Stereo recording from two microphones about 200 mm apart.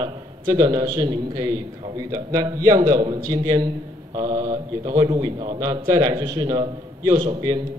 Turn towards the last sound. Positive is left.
turn(degrees=-20)  # may be behind; listen again after turning